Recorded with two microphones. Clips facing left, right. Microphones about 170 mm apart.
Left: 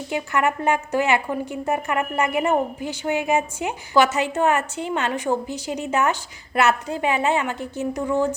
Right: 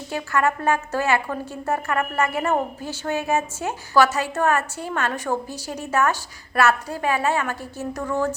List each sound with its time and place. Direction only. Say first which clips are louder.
0.1 s a woman's voice: even; 20° left (ahead or behind)